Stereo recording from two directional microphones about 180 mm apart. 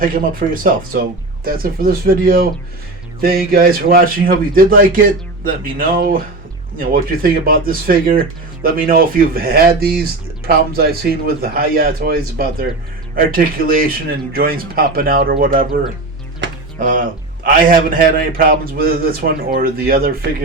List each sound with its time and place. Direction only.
0.0 s a man's voice: 50° right (ahead or behind)
16.8 s a man's voice: 45° right (ahead or behind)